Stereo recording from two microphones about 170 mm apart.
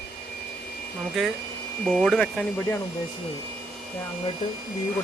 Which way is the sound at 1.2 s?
Centre (ahead or behind).